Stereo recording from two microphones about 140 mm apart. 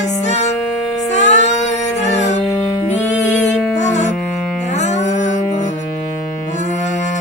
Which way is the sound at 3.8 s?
55° left (ahead or behind).